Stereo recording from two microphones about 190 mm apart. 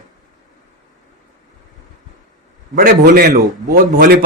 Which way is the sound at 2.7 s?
55° right (ahead or behind).